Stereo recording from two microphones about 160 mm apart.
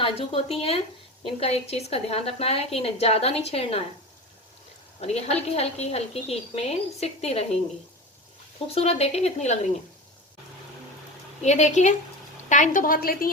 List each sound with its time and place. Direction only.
0.0 s a woman's voice: 35° left (ahead or behind)
4.9 s a woman's voice: 40° left (ahead or behind)
8.6 s a woman's voice: 40° left (ahead or behind)
11.4 s a woman's voice: 45° left (ahead or behind); by 13.3 s 65° left (ahead or behind)